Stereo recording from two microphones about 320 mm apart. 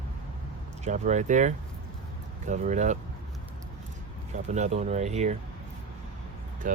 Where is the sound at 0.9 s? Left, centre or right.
Right.